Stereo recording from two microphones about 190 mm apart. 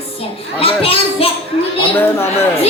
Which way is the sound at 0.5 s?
30° left (ahead or behind).